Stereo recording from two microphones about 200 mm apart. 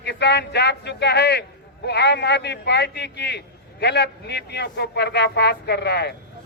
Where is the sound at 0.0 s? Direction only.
55° left (ahead or behind).